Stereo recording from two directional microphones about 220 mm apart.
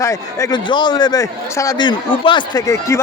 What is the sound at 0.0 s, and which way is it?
A man's voice, 15° left (ahead or behind).